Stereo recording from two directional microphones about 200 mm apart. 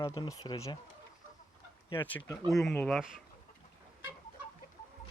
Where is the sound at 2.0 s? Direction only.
10° left (ahead or behind).